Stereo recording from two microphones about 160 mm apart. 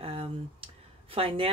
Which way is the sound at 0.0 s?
35° right (ahead or behind).